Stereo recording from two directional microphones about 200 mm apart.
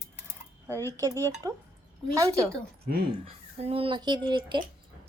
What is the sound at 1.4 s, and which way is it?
A woman's voice, 15° right (ahead or behind).